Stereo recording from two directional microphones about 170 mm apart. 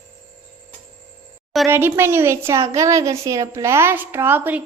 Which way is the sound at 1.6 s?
15° right (ahead or behind).